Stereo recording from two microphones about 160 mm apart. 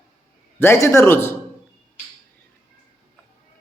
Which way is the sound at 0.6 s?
15° left (ahead or behind).